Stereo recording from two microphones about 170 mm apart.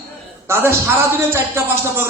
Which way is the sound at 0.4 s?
15° right (ahead or behind).